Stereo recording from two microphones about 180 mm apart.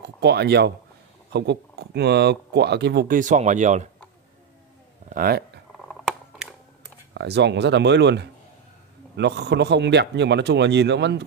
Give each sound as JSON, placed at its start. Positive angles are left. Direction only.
{"t": 0.0, "sound": "speech", "side_deg": -65}
{"t": 5.1, "sound": "speech", "side_deg": -60}
{"t": 5.8, "sound": "biting", "side_deg": 0}
{"t": 7.2, "sound": "speech", "side_deg": -70}